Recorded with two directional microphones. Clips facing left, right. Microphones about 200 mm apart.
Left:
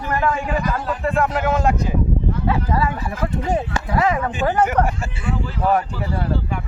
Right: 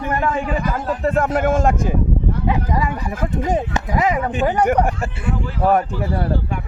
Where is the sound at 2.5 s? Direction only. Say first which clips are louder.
Left 1 dB; 15° right (ahead or behind).